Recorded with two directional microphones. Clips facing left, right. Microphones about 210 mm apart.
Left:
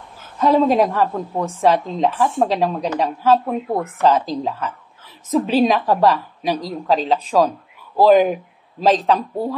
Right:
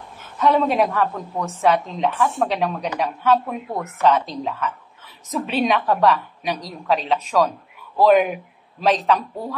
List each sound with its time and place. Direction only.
0.4 s a woman's voice: 30° left (ahead or behind)